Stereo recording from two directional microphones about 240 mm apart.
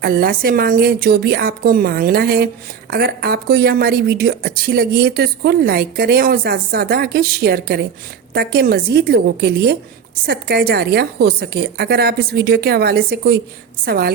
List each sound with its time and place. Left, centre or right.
0.0 s a woman's voice: right